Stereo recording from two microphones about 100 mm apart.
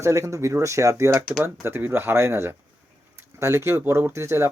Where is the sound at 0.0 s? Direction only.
30° right (ahead or behind).